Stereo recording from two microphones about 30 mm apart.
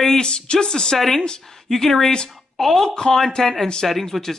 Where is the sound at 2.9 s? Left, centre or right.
Left.